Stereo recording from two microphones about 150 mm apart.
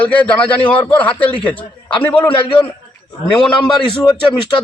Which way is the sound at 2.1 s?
35° left (ahead or behind).